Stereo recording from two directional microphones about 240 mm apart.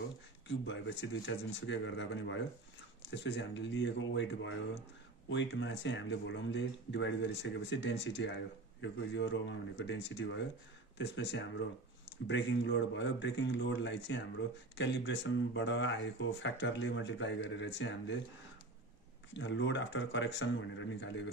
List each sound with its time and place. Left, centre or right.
0.5 s speech: left
19.3 s speech: left